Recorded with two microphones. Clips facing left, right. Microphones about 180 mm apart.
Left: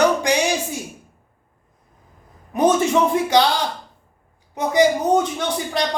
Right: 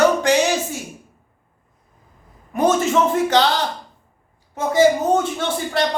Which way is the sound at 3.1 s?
15° left (ahead or behind).